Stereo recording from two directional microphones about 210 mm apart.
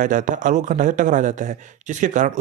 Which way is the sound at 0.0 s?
40° right (ahead or behind).